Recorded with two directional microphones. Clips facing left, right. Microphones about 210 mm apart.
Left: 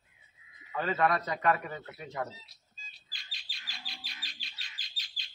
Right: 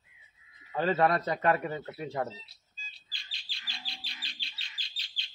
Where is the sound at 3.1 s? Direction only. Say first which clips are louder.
Left 1 dB; 30° right (ahead or behind).